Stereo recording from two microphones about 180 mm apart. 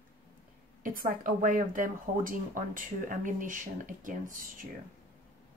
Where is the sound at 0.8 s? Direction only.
50° right (ahead or behind).